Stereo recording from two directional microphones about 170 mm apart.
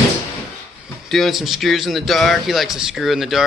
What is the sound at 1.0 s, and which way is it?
Speech, centre (ahead or behind).